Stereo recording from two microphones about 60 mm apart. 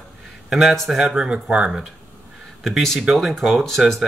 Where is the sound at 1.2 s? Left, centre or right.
Centre.